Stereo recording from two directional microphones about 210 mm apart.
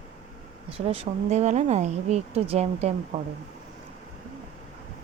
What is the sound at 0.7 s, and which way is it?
Speech, 30° right (ahead or behind).